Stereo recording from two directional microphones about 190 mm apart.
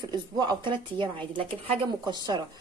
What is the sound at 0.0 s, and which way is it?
Speech, 20° right (ahead or behind).